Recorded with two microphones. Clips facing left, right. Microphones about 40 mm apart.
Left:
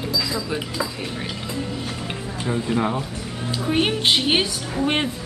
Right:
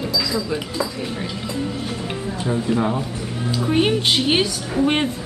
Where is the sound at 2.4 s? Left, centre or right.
Centre.